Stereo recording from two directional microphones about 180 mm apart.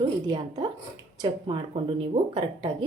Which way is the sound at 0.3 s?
25° right (ahead or behind).